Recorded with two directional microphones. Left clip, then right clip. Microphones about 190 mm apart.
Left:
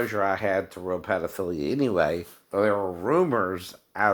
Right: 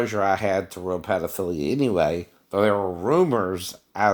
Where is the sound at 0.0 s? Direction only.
45° right (ahead or behind).